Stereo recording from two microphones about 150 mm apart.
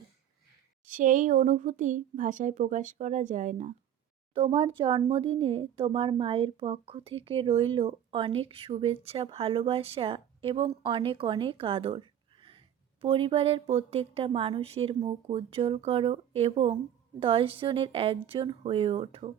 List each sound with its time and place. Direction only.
0.9 s speech: 65° right (ahead or behind)
4.5 s speech: 35° right (ahead or behind)